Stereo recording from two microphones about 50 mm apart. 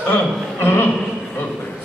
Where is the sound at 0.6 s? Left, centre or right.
Left.